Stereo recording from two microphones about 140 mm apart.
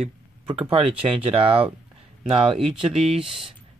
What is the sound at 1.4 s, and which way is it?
Speech, 40° right (ahead or behind).